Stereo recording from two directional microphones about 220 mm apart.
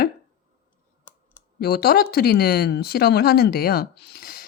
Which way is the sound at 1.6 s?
45° left (ahead or behind).